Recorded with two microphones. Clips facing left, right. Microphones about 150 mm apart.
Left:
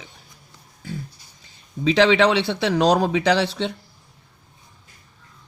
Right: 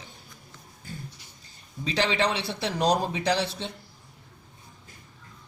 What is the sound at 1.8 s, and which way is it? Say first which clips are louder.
Speech: left 10 dB; 90° left.